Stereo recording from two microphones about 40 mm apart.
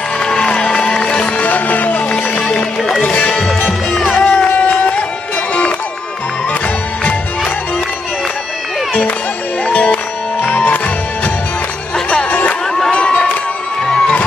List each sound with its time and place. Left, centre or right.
0.2 s music: left
1.4 s music: left
4.2 s music: left
4.6 s music: left
9.7 s music: left
12.3 s music: left